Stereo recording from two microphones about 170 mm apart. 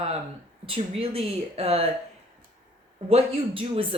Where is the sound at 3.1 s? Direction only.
35° right (ahead or behind).